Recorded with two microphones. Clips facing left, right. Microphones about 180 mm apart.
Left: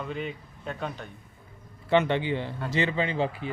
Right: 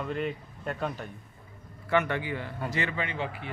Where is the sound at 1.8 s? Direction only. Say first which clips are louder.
Left 4 dB; 25° left (ahead or behind).